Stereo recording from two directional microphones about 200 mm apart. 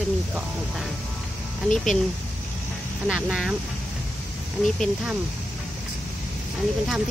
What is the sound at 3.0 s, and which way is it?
Speech, 5° right (ahead or behind).